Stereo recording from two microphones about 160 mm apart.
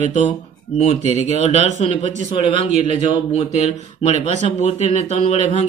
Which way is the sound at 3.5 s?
45° right (ahead or behind).